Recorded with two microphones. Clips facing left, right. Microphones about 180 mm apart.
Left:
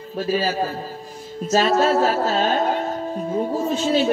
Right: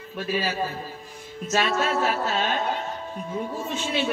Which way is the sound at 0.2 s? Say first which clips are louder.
Left 5 dB; 35° left (ahead or behind).